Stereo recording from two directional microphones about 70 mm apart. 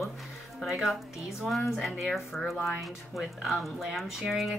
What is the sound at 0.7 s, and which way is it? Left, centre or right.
Speech, centre.